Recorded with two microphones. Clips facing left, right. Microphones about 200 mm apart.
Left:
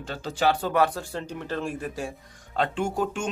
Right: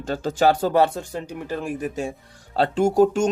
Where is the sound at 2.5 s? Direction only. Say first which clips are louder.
Right 8 dB; 35° right (ahead or behind).